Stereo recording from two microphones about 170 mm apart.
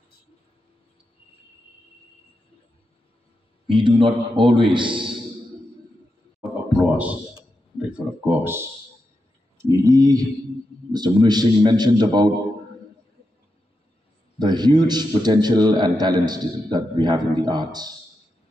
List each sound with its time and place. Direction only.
3.7 s a man's voice: 30° right (ahead or behind)
6.4 s a sound: 5° right (ahead or behind)
7.9 s speech: 10° right (ahead or behind)
9.7 s a man's voice: 20° right (ahead or behind)
14.4 s a man's voice: 25° right (ahead or behind)